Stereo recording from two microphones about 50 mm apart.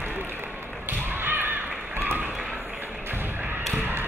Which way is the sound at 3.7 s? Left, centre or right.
Right.